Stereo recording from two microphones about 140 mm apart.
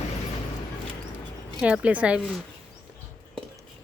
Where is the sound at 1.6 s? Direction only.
5° right (ahead or behind).